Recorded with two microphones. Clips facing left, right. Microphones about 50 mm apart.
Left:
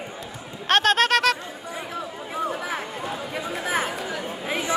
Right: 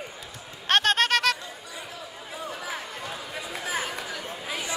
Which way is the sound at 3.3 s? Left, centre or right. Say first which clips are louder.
Left 5 dB; left.